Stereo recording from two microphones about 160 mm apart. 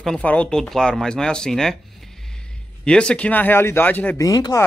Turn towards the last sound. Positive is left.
turn(degrees=20)  # may be behind; listen again after turning